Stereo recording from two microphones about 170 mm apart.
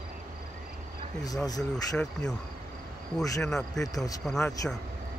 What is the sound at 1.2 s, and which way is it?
Speech, 20° left (ahead or behind).